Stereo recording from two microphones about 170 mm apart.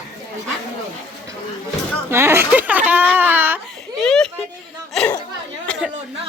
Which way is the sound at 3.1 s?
10° right (ahead or behind).